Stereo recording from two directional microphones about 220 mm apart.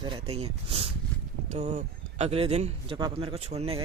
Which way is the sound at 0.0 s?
25° right (ahead or behind).